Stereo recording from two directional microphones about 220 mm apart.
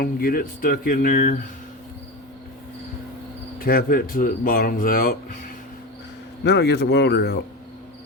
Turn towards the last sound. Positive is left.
turn(degrees=50)  # may be behind; listen again after turning